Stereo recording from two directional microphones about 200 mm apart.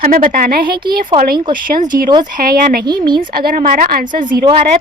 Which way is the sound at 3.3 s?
45° right (ahead or behind).